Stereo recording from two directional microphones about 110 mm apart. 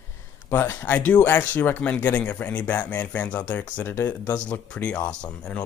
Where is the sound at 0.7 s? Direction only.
15° left (ahead or behind).